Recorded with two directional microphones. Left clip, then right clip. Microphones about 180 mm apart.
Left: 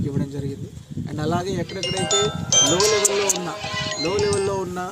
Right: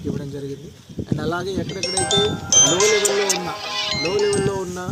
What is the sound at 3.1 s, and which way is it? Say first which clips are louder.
Speech: right 2 dB; centre (ahead or behind).